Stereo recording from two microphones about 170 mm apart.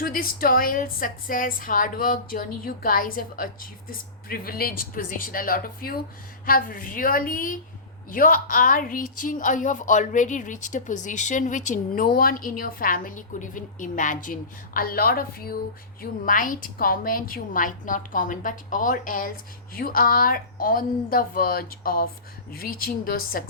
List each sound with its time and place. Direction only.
0.0 s a woman's voice: 60° left (ahead or behind)
12.0 s a woman's voice: 60° left (ahead or behind)